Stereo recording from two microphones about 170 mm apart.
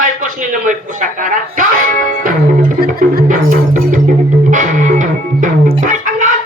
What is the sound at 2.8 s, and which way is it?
Music, 60° right (ahead or behind).